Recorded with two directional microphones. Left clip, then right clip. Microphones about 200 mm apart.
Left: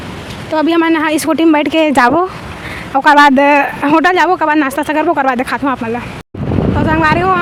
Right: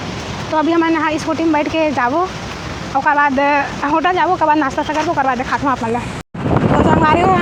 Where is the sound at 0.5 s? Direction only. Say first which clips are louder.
Left 3 dB; 60° left (ahead or behind).